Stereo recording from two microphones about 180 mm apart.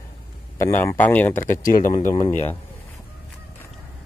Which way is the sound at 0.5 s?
15° left (ahead or behind).